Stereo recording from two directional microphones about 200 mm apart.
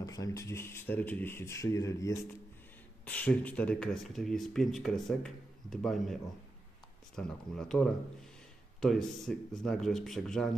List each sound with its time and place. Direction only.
0.0 s speech: 15° left (ahead or behind); by 6.1 s centre (ahead or behind)
7.2 s speech: 5° left (ahead or behind)